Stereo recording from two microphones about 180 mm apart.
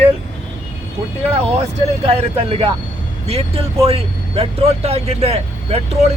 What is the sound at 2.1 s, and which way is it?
Speech, 30° right (ahead or behind).